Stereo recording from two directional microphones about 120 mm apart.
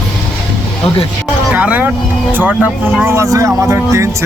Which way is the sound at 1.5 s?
10° right (ahead or behind).